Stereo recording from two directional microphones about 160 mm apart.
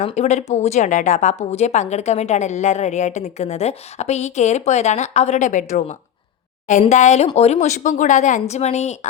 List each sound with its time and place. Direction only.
0.0 s a woman's voice: 45° left (ahead or behind)